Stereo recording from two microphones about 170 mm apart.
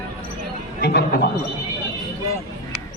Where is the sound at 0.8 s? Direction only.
75° left (ahead or behind).